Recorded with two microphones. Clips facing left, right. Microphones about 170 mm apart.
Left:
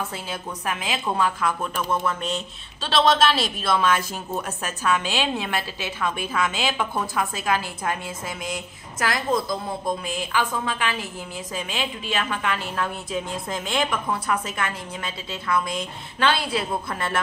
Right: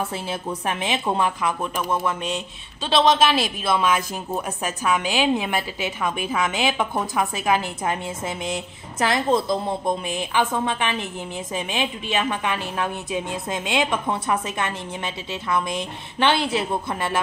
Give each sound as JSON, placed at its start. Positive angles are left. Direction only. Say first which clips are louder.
{"t": 0.1, "sound": "a woman's voice", "louder": "right 4 dB", "side_deg": -30}